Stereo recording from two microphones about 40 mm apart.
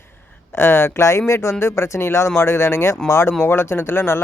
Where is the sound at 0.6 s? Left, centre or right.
Left.